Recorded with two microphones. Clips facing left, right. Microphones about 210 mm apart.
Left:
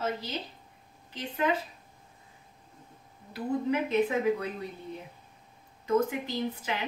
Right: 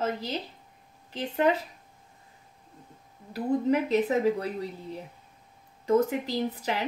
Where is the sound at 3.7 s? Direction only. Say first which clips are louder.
Right 1 dB; 40° right (ahead or behind).